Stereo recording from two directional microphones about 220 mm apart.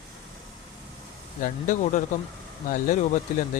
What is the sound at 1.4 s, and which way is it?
Speech, 35° left (ahead or behind).